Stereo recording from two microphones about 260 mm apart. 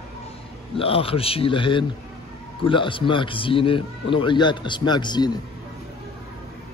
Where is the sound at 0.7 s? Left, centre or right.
Left.